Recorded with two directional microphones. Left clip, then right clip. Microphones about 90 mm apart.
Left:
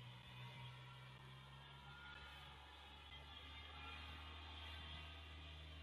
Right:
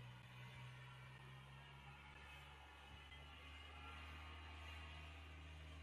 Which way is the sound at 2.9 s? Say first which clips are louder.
Left 2 dB; 25° left (ahead or behind).